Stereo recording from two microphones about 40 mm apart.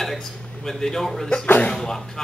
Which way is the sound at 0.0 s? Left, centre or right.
Centre.